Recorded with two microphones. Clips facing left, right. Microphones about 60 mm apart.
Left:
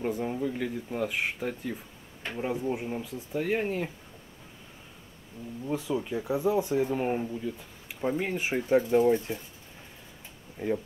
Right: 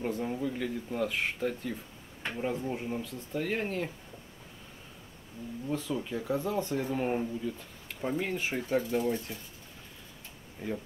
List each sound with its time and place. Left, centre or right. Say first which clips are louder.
0.0 s speech: left 2 dB; centre
5.7 s speech: left 3 dB; centre
10.6 s speech: left 7 dB; left